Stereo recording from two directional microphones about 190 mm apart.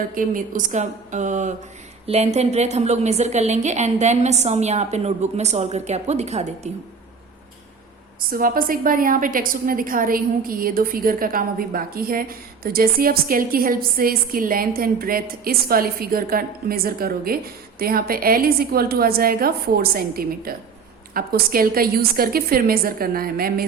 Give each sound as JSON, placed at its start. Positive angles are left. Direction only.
{"t": 0.1, "sound": "a woman's voice", "side_deg": -45}
{"t": 8.3, "sound": "a woman's voice", "side_deg": -50}